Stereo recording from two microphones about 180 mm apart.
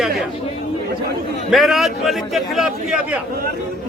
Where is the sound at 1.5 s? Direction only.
Centre (ahead or behind).